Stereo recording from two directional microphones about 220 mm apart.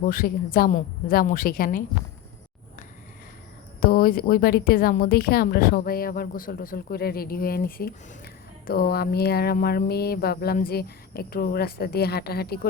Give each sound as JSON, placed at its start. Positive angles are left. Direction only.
{"t": 0.0, "sound": "a woman's voice", "side_deg": 40}
{"t": 3.8, "sound": "a woman's voice", "side_deg": 45}